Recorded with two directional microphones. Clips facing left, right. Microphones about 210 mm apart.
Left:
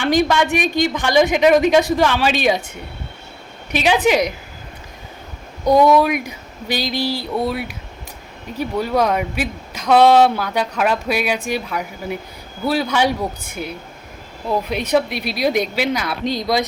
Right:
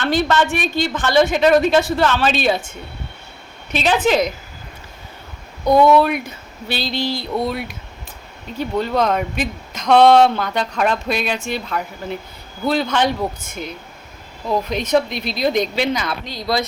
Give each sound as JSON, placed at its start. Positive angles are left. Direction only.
{"t": 0.0, "sound": "speech", "side_deg": 15}
{"t": 3.7, "sound": "speech", "side_deg": 10}
{"t": 5.6, "sound": "speech", "side_deg": 10}
{"t": 16.2, "sound": "speech", "side_deg": 20}